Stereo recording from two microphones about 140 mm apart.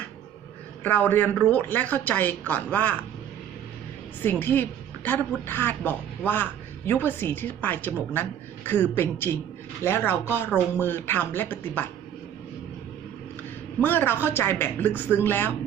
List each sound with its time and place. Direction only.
0.9 s a woman's voice: 10° left (ahead or behind)
4.2 s a woman's voice: 15° left (ahead or behind)
13.8 s a woman's voice: 15° left (ahead or behind)